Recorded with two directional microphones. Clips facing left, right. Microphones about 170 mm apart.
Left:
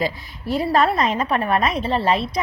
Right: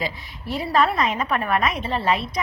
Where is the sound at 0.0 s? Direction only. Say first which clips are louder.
Left 5 dB; 40° left (ahead or behind).